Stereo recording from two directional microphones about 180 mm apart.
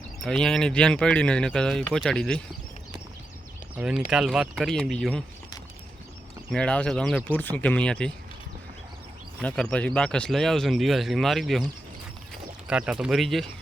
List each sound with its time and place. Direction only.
0.3 s speech: 5° left (ahead or behind)
3.8 s speech: 5° right (ahead or behind)
6.5 s speech: 5° left (ahead or behind)
9.4 s speech: 5° left (ahead or behind)